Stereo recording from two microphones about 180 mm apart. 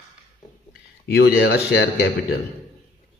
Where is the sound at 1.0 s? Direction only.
70° left (ahead or behind).